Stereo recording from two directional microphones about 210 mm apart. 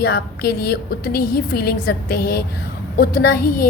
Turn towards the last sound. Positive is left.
turn(degrees=45)  # may be behind; listen again after turning